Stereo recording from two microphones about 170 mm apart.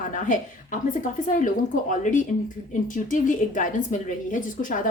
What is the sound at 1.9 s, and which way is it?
A woman's voice, 50° left (ahead or behind).